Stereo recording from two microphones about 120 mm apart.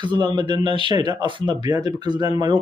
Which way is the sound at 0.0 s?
40° right (ahead or behind).